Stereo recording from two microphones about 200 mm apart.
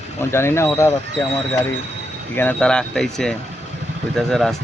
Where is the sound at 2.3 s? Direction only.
5° left (ahead or behind).